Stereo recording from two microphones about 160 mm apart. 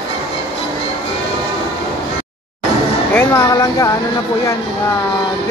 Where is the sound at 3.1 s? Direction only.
15° left (ahead or behind).